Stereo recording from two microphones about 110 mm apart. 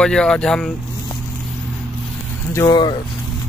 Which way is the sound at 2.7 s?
45° left (ahead or behind).